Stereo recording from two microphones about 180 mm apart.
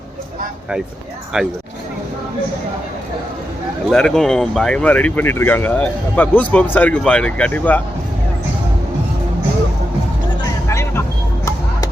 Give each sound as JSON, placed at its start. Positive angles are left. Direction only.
{"t": 1.3, "sound": "speech", "side_deg": -5}
{"t": 3.8, "sound": "speech", "side_deg": 5}
{"t": 10.7, "sound": "vehicle", "side_deg": 15}